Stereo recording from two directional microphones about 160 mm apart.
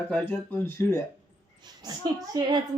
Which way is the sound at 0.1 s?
10° left (ahead or behind).